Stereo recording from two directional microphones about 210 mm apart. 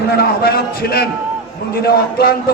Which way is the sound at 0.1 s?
50° left (ahead or behind).